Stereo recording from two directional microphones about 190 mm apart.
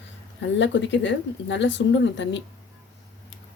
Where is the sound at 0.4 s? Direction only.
75° left (ahead or behind).